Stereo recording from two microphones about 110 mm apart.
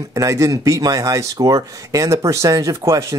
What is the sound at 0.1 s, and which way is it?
Speech, 30° right (ahead or behind).